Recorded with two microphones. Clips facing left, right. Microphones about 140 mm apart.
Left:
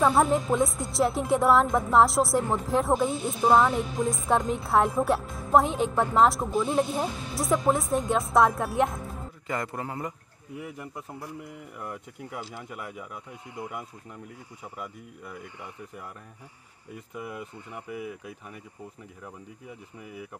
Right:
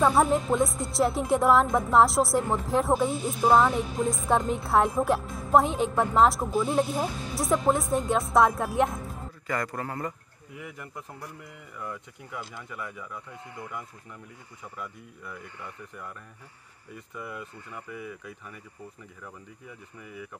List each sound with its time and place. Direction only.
0.0 s a woman's voice: centre (ahead or behind)
9.5 s speech: 20° left (ahead or behind)
10.5 s speech: 5° left (ahead or behind)
16.9 s speech: 10° left (ahead or behind)
20.0 s a woman's voice: 5° left (ahead or behind)